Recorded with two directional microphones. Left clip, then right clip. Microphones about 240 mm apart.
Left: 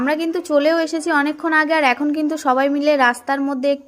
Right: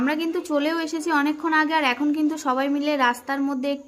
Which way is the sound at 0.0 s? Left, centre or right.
Centre.